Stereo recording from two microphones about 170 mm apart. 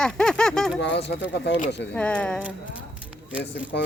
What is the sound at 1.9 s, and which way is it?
Speech, 5° left (ahead or behind).